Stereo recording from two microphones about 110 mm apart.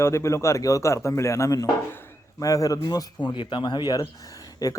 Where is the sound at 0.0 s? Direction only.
25° left (ahead or behind).